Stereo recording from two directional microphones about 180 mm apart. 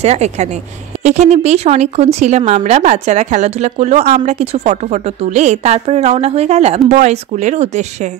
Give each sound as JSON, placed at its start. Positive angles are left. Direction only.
{"t": 0.0, "sound": "speech", "side_deg": -35}